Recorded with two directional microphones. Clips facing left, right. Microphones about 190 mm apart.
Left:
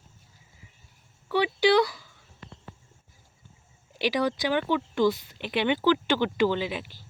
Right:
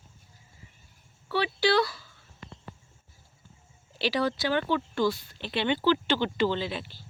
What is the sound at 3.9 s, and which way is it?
Speech, 15° left (ahead or behind).